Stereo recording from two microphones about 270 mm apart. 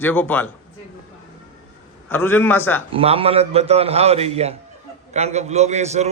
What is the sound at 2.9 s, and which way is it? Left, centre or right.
A man's voice, right.